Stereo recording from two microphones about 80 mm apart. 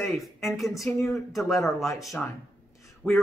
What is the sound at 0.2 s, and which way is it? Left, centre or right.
Speech, centre.